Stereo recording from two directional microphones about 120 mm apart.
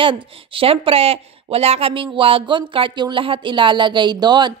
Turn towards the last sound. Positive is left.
turn(degrees=-35)  # may be behind; listen again after turning